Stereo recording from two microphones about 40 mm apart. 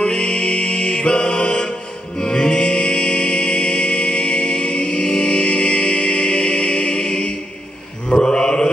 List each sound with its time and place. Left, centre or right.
0.0 s music: left
8.1 s mantra: centre